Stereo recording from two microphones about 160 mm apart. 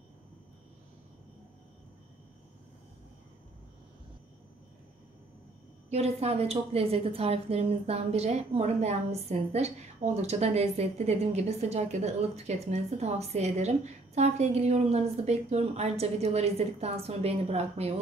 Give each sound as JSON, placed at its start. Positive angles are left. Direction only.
{"t": 5.9, "sound": "a woman's voice", "side_deg": -40}